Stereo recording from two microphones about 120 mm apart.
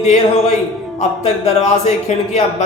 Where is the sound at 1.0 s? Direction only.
70° left (ahead or behind).